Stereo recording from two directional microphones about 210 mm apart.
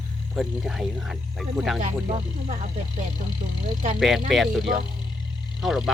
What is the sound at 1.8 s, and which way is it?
Speech, 30° right (ahead or behind).